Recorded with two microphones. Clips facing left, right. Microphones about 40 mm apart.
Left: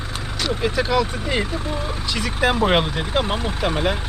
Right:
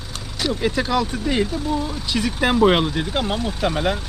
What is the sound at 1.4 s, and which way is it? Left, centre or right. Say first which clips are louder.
Speech: right 3 dB; left.